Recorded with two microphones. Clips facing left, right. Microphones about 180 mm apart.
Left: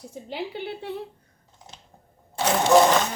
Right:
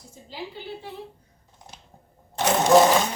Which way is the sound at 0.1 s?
65° left (ahead or behind).